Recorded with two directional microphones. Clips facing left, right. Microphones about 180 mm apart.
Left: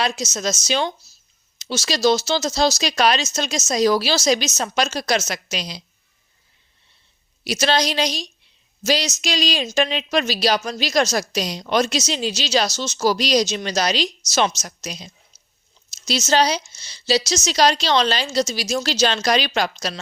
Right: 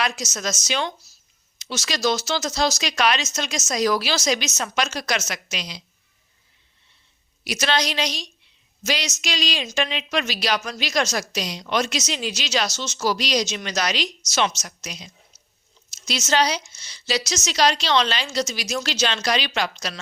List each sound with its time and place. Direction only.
0.0 s a woman's voice: 25° left (ahead or behind)
7.4 s speech: 30° left (ahead or behind)